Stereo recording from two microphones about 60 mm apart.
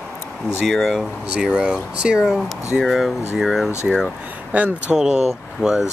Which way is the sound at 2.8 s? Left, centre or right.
Centre.